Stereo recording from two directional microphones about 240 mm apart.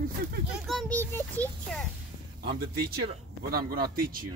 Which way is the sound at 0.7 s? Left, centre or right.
Centre.